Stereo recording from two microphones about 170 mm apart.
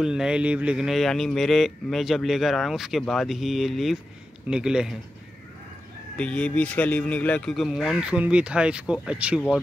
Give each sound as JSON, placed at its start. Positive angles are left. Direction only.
{"t": 0.0, "sound": "speech", "side_deg": -5}
{"t": 6.1, "sound": "speech", "side_deg": 5}